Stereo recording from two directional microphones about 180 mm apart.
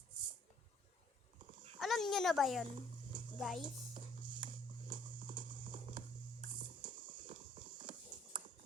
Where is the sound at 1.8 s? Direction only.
Centre (ahead or behind).